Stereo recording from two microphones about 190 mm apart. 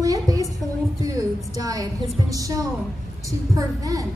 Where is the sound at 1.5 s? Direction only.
20° right (ahead or behind).